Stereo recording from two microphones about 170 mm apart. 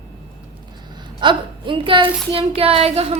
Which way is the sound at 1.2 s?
30° right (ahead or behind).